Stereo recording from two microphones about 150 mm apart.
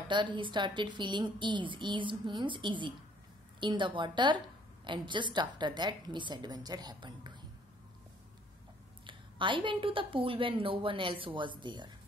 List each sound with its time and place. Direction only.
0.1 s a woman's voice: 30° right (ahead or behind)
9.0 s a woman's voice: 35° right (ahead or behind)